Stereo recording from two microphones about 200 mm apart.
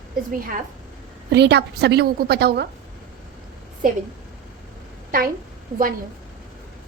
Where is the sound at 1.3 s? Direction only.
55° right (ahead or behind).